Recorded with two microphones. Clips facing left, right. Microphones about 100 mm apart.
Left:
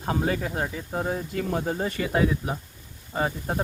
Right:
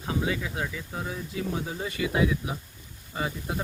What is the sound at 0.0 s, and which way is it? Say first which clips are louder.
Speech: left 3 dB; 45° left (ahead or behind).